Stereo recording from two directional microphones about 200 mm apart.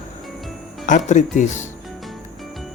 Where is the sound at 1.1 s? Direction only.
35° left (ahead or behind).